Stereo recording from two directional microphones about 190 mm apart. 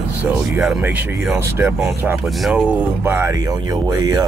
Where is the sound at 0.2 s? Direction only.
5° right (ahead or behind).